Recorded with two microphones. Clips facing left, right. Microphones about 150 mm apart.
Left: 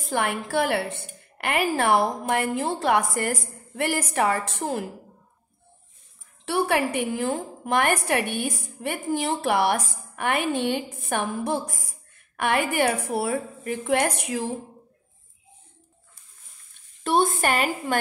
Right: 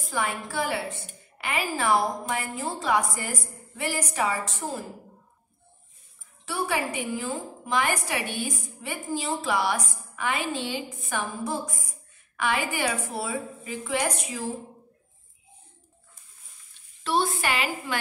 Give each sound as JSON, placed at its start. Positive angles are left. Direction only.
{"t": 0.0, "sound": "a woman's voice", "side_deg": 65}
{"t": 6.4, "sound": "a woman's voice", "side_deg": 65}
{"t": 17.0, "sound": "a woman's voice", "side_deg": 50}